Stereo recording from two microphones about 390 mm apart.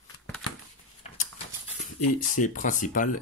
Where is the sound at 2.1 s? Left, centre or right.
Centre.